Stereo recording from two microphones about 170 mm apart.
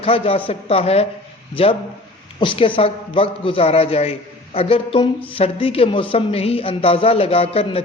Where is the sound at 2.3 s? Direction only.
30° left (ahead or behind).